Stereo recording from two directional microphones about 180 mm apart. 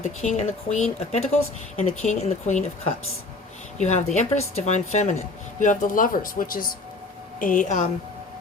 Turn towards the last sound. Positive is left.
turn(degrees=45)  # may be behind; listen again after turning